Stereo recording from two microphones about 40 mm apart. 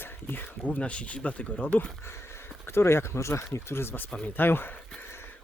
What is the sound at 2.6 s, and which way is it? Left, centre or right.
Speech, left.